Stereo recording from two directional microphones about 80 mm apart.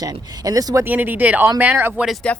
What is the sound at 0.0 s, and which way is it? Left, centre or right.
Speech, right.